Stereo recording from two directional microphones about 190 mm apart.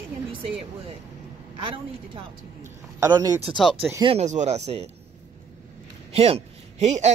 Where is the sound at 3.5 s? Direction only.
5° right (ahead or behind).